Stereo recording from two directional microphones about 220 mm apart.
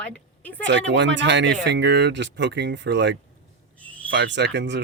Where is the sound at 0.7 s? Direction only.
55° right (ahead or behind).